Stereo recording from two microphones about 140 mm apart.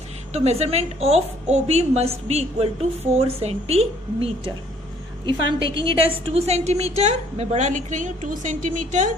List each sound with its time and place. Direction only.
0.3 s a woman's voice: 50° right (ahead or behind)
5.2 s a woman's voice: 35° right (ahead or behind); by 9.1 s 65° right (ahead or behind)